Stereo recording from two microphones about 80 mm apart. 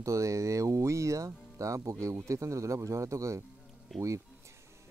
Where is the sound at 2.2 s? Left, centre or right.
Right.